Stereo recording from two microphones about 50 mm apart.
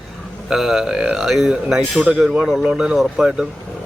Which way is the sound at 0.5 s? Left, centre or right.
Centre.